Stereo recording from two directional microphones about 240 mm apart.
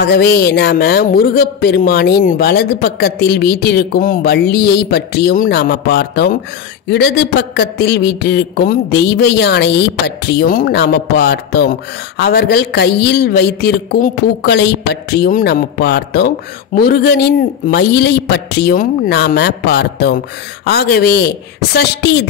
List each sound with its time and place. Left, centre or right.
0.0 s speech: left